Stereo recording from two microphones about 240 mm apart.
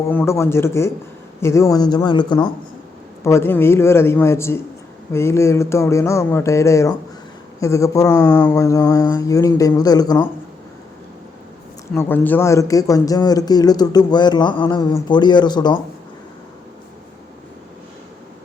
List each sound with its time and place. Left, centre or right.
0.1 s speech: centre
11.9 s speech: centre